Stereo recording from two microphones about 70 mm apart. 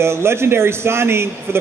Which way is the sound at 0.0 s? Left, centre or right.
Right.